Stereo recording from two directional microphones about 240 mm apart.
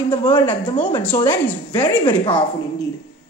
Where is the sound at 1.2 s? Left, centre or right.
Centre.